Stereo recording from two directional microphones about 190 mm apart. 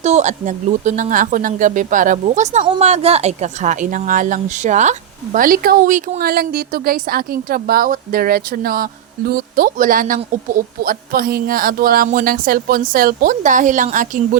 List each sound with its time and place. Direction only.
0.0 s speech: 35° right (ahead or behind)